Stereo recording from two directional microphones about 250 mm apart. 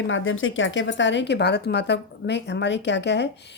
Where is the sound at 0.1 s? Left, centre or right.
Left.